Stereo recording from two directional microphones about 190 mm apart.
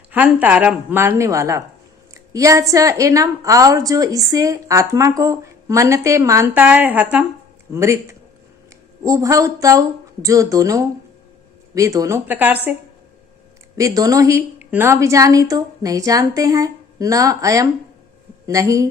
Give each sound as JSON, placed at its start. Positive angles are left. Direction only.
{"t": 0.1, "sound": "a woman's voice", "side_deg": -5}
{"t": 13.7, "sound": "a woman's voice", "side_deg": -20}